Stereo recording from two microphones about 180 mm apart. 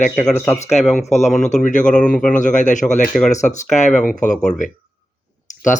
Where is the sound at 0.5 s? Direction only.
40° left (ahead or behind).